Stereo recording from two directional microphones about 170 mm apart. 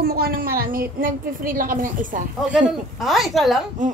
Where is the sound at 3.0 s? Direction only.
Centre (ahead or behind).